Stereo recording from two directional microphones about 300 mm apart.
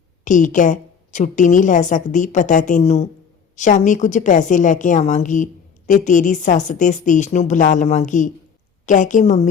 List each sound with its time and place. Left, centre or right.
0.3 s a woman's voice: left